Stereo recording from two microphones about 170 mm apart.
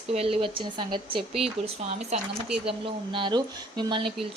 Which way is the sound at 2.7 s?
30° right (ahead or behind).